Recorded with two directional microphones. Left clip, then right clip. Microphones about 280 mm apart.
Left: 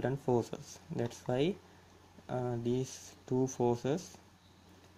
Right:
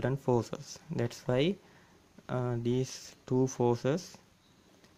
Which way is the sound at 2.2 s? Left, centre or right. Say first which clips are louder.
Right 2 dB; right.